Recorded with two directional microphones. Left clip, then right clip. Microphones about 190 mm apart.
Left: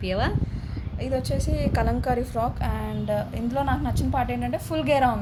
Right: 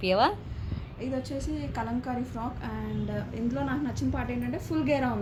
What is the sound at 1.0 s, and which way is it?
A woman's voice, 50° left (ahead or behind).